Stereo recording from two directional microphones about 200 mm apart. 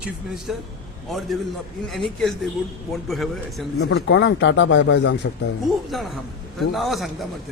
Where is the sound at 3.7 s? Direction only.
65° left (ahead or behind).